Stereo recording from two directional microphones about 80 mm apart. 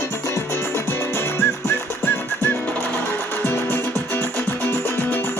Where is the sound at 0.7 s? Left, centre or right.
Left.